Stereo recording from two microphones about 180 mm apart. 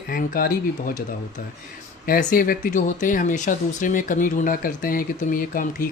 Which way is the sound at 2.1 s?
50° left (ahead or behind).